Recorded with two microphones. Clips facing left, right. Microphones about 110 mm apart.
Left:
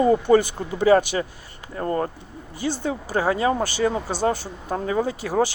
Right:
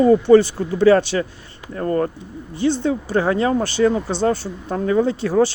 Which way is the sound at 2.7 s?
10° left (ahead or behind).